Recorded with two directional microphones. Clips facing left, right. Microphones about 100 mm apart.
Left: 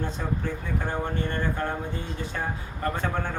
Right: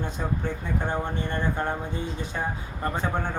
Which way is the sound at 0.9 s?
20° right (ahead or behind).